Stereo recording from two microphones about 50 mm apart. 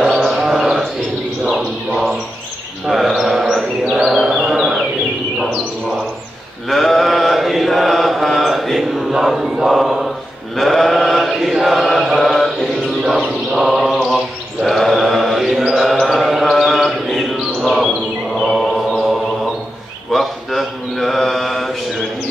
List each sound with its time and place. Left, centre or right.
0.0 s a sound: centre
1.4 s bird: centre
2.9 s a sound: centre
3.4 s chant: centre
4.0 s a sound: centre
6.7 s mantra: centre
9.7 s chant: centre
12.2 s mantra: centre
13.0 s a sound: centre
14.0 s mantra: centre
15.7 s chant: centre
18.4 s music: centre
20.1 s mantra: centre